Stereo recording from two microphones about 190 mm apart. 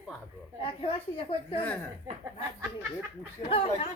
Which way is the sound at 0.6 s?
25° left (ahead or behind).